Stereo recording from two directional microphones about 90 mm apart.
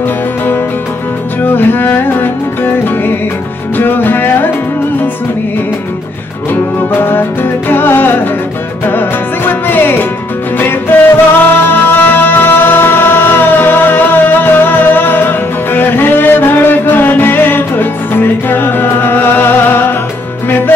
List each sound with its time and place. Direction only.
1.4 s music: 25° left (ahead or behind)
6.5 s music: 25° left (ahead or behind)